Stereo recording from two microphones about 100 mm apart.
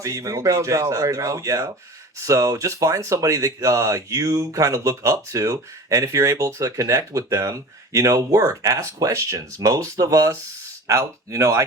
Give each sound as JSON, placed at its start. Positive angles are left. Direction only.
{"t": 0.0, "sound": "speech", "side_deg": -35}